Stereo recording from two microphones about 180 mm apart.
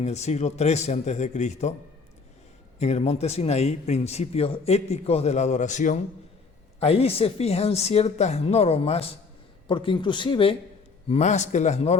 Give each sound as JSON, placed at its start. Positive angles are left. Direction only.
{"t": 0.0, "sound": "a man's voice", "side_deg": 40}
{"t": 2.7, "sound": "a man's voice", "side_deg": 40}
{"t": 11.1, "sound": "a man's voice", "side_deg": 40}